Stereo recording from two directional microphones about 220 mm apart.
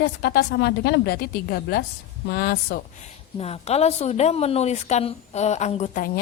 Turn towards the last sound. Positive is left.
turn(degrees=40)  # may be behind; listen again after turning